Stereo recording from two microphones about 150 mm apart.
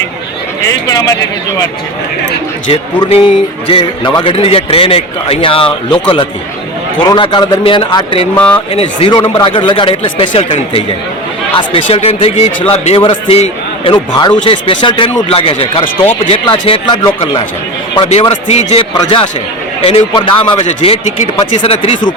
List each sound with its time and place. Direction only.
0.9 s speech: 25° left (ahead or behind)
2.6 s a man's voice: 35° left (ahead or behind)
18.8 s a man's voice: 30° left (ahead or behind)